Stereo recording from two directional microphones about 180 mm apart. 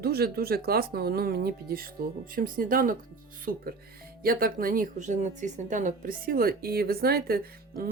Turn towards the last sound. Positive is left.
turn(degrees=-55)  # may be behind; listen again after turning